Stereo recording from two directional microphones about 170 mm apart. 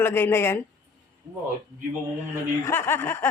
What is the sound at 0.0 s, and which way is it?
Speech, 15° left (ahead or behind).